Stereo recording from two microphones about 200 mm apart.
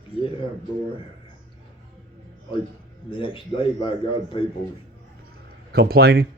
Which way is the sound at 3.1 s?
25° left (ahead or behind).